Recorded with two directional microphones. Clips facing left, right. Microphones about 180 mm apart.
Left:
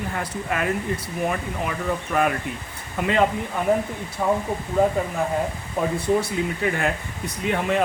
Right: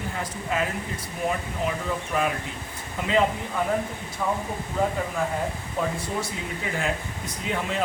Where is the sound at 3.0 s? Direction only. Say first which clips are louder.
Left 6 dB; 60° left (ahead or behind).